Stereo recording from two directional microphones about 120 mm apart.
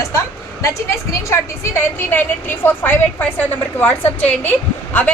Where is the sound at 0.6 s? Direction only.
25° left (ahead or behind).